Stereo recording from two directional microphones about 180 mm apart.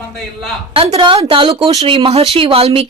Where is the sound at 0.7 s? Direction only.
30° right (ahead or behind).